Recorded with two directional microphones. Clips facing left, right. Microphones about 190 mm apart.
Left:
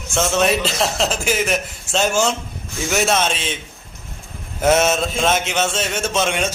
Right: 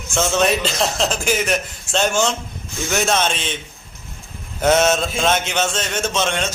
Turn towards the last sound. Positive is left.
turn(degrees=5)  # may be behind; listen again after turning